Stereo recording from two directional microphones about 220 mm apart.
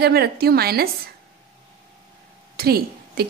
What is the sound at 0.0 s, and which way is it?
A woman's voice, 45° right (ahead or behind).